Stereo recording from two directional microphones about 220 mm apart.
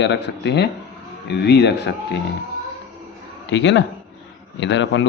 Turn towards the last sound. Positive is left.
turn(degrees=55)  # may be behind; listen again after turning